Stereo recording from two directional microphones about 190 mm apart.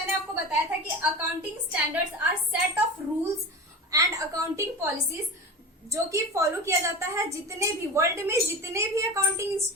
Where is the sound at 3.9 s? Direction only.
15° right (ahead or behind).